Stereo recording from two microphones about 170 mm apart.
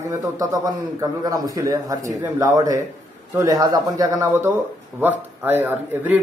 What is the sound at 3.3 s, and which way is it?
A man's voice, 20° right (ahead or behind).